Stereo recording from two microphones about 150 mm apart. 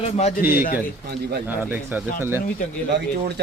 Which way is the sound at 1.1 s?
90° right.